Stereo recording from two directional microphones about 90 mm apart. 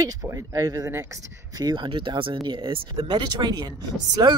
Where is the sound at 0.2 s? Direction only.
40° right (ahead or behind).